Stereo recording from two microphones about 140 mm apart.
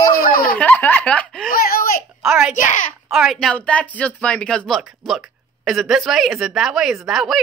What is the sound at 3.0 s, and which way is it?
Speech, centre (ahead or behind).